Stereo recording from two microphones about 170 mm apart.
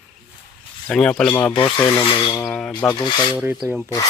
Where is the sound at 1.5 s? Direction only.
30° left (ahead or behind).